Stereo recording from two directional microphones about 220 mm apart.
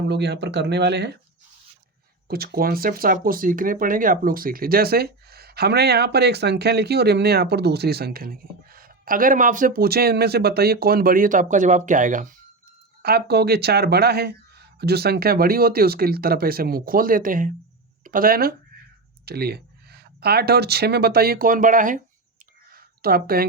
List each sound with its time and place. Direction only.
0.1 s speech: 50° right (ahead or behind)
2.2 s speech: 45° right (ahead or behind)
22.7 s a sound: 40° right (ahead or behind)